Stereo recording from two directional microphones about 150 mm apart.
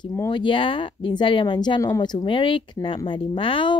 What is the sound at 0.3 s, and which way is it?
A woman's voice, 35° left (ahead or behind).